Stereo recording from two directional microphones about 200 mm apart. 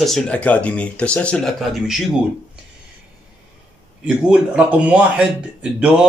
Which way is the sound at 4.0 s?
5° right (ahead or behind).